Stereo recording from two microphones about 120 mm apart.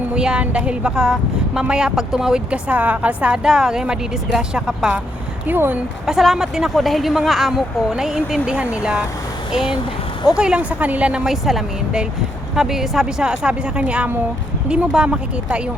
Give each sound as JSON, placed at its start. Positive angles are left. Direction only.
{"t": 0.1, "sound": "speech", "side_deg": -10}
{"t": 6.1, "sound": "speech", "side_deg": -5}
{"t": 10.2, "sound": "speech", "side_deg": -5}